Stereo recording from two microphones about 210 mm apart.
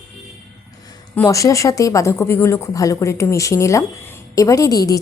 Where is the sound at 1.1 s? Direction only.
15° left (ahead or behind).